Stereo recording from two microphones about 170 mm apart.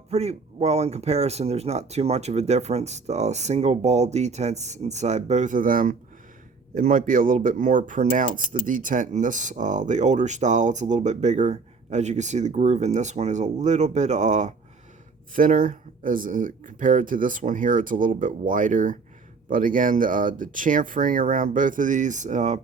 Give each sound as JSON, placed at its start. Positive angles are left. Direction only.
{"t": 0.1, "sound": "speech", "side_deg": -40}